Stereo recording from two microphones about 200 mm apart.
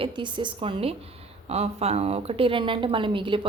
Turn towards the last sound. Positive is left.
turn(degrees=-25)  # may be behind; listen again after turning